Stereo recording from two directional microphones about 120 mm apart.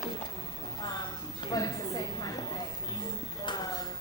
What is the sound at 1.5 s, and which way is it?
Speech, 35° left (ahead or behind).